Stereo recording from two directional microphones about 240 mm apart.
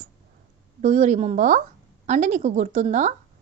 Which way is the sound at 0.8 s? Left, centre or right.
Right.